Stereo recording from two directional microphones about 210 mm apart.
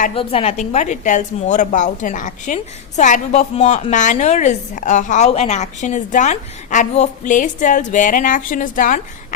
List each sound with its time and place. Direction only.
0.1 s a woman's voice: 25° left (ahead or behind)